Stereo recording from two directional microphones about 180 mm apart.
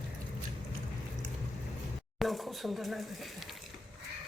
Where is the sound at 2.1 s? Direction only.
Centre (ahead or behind).